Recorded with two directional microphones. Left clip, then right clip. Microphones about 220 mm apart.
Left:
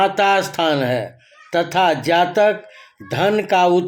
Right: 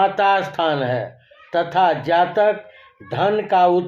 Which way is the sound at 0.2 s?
50° left (ahead or behind).